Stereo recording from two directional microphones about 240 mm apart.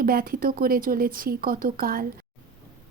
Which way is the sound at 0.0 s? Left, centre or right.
Right.